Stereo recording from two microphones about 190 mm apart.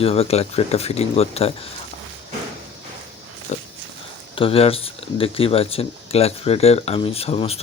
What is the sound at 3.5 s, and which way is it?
Speech, 40° left (ahead or behind).